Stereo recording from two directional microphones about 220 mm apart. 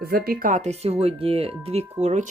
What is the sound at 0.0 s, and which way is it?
Speech, 45° right (ahead or behind).